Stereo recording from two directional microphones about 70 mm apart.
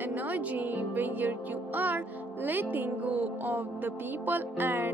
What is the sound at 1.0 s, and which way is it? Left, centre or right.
Speech, right.